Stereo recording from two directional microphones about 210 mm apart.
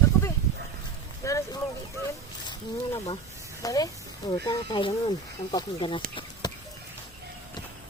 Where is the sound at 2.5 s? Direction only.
20° left (ahead or behind).